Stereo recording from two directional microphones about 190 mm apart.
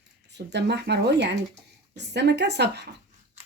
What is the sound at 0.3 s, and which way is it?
Speech, 65° right (ahead or behind).